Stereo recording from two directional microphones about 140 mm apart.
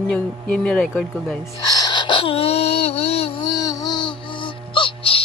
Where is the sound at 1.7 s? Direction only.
35° left (ahead or behind).